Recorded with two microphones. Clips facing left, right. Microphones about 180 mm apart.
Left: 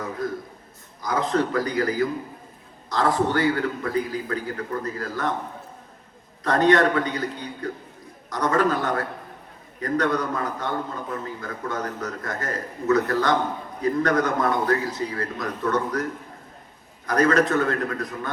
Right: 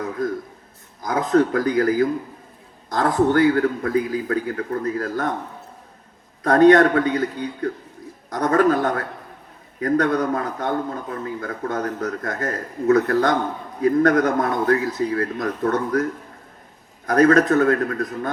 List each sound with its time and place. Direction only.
0.0 s a man's voice: 50° right (ahead or behind)
6.4 s a man's voice: 50° right (ahead or behind)
17.1 s a man's voice: 50° right (ahead or behind)